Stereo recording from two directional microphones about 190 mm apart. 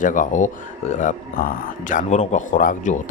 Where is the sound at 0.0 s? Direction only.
45° left (ahead or behind).